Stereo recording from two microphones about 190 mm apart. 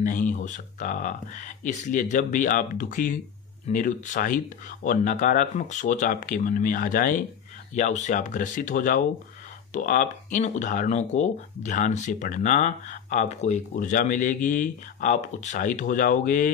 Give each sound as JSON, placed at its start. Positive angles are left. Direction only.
{"t": 0.0, "sound": "speech", "side_deg": 45}